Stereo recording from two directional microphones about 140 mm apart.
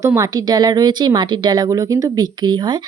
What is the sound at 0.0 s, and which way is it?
Speech, 20° right (ahead or behind).